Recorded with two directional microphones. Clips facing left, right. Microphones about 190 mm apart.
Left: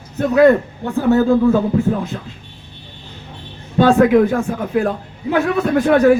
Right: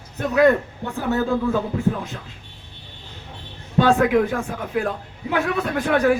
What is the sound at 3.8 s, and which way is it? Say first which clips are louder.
Speech: left 6 dB; 40° left (ahead or behind).